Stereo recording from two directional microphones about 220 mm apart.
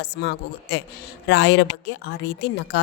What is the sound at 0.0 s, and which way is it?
A woman's voice, 50° left (ahead or behind).